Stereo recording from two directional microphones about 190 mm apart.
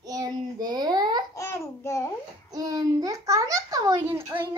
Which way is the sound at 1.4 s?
15° left (ahead or behind).